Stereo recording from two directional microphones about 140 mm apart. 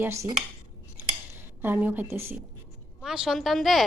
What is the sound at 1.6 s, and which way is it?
Speech, 15° right (ahead or behind).